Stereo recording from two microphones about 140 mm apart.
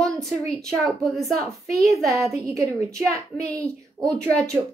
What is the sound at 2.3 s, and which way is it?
Speech, 20° right (ahead or behind).